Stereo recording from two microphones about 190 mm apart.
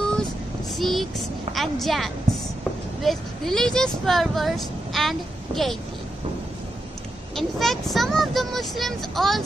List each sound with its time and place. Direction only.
0.7 s a sound: centre (ahead or behind)
1.5 s speech: centre (ahead or behind)
7.3 s speech: centre (ahead or behind)